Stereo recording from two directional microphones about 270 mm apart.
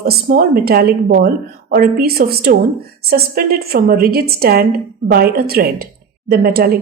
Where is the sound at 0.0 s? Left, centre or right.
Right.